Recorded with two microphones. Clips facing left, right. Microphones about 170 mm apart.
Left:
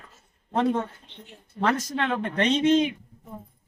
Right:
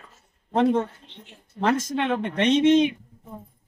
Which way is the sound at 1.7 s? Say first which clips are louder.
Right 3 dB; 20° right (ahead or behind).